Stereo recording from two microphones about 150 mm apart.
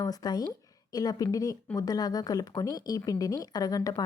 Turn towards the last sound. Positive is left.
turn(degrees=25)  # may be behind; listen again after turning